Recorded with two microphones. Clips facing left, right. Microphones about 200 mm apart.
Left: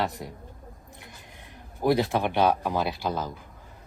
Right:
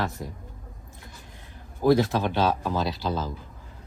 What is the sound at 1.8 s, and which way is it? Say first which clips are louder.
Speech: right 2 dB; 15° left (ahead or behind).